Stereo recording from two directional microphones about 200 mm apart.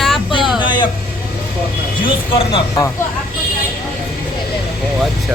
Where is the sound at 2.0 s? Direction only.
25° left (ahead or behind).